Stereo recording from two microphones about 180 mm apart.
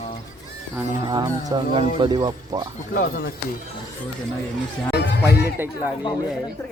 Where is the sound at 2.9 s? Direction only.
65° left (ahead or behind).